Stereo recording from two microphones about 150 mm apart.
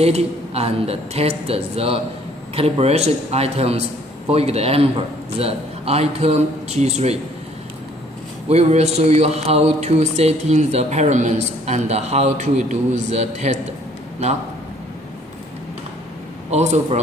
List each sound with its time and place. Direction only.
0.0 s speech: 45° right (ahead or behind)
8.5 s speech: 45° right (ahead or behind)
16.4 s speech: 50° right (ahead or behind)